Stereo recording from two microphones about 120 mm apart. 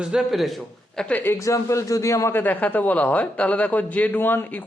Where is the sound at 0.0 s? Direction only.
5° right (ahead or behind).